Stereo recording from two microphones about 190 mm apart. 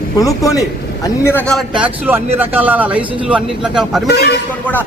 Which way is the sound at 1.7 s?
10° right (ahead or behind).